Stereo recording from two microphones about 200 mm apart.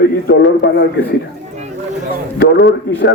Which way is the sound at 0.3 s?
55° left (ahead or behind).